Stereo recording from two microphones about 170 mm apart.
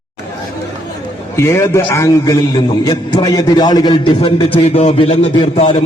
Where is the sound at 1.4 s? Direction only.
15° left (ahead or behind).